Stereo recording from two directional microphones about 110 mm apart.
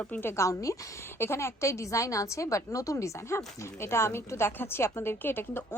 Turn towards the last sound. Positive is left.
turn(degrees=20)  # may be behind; listen again after turning